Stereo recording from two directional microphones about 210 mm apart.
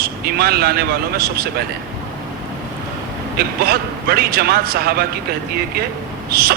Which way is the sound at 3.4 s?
45° right (ahead or behind).